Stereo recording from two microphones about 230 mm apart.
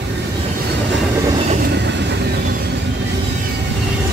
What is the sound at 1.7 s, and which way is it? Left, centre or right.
Train, right.